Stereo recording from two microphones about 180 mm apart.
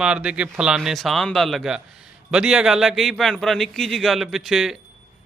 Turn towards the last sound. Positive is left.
turn(degrees=0)  # may be behind; listen again after turning